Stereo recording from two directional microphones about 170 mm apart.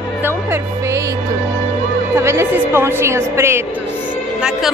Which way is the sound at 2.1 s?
15° right (ahead or behind).